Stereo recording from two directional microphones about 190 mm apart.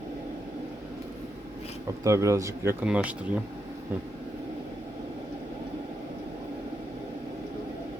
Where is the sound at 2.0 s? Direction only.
15° right (ahead or behind).